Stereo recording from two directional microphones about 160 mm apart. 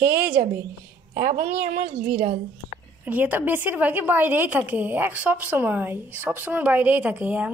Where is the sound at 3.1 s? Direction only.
10° right (ahead or behind).